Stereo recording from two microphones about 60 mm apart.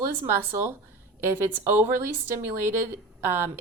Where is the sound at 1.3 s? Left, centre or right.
Right.